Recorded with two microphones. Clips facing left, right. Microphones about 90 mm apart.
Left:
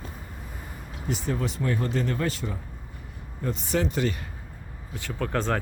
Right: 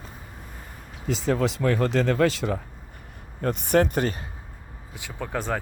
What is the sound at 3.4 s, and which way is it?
Speech, 60° right (ahead or behind).